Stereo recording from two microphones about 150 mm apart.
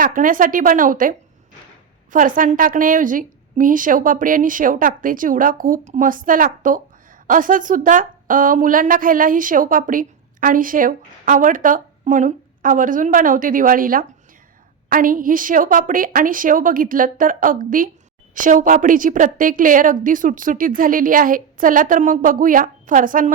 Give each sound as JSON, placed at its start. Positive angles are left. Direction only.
{"t": 0.0, "sound": "a woman's voice", "side_deg": -65}